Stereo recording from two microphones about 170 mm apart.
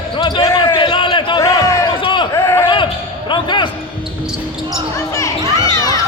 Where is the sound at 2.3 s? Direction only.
15° left (ahead or behind).